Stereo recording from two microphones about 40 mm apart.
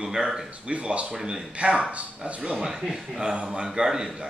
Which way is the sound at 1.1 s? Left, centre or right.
Centre.